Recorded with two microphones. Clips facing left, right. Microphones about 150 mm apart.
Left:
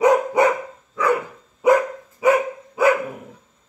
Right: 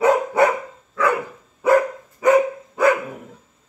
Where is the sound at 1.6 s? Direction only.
15° left (ahead or behind).